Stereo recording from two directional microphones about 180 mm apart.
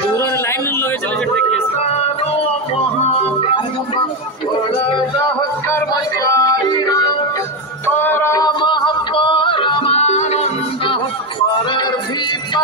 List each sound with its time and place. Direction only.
3.3 s music: 30° left (ahead or behind)
5.7 s music: 15° left (ahead or behind); by 11.0 s 40° left (ahead or behind)